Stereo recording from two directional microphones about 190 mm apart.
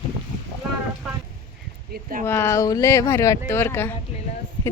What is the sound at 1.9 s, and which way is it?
Speech, 45° right (ahead or behind).